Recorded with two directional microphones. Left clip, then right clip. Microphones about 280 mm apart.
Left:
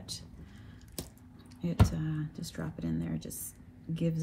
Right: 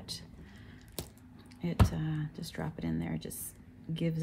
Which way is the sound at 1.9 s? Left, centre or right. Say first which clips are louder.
Even; right.